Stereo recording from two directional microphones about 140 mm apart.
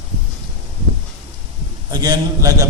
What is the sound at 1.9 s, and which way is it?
Speech, 30° right (ahead or behind).